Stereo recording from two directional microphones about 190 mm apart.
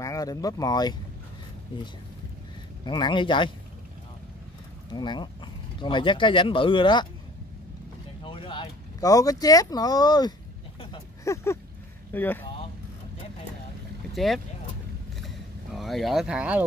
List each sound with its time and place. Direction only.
0.0 s speech: 15° left (ahead or behind)
2.8 s a man's voice: 25° left (ahead or behind)
4.9 s speech: 25° left (ahead or behind)
8.2 s speech: 25° left (ahead or behind)
10.8 s a sound: 25° left (ahead or behind)
12.1 s speech: 10° left (ahead or behind)
14.1 s speech: centre (ahead or behind)
15.2 s vehicle: centre (ahead or behind)